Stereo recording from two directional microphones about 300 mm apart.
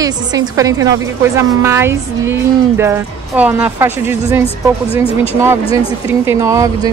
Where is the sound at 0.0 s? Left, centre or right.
Centre.